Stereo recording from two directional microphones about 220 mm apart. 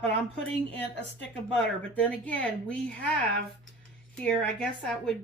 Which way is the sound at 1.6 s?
5° left (ahead or behind).